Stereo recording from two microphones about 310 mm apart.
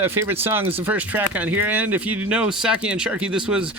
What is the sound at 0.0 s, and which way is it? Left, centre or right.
Speech, centre.